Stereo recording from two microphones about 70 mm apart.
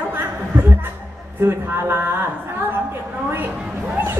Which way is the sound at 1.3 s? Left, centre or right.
Right.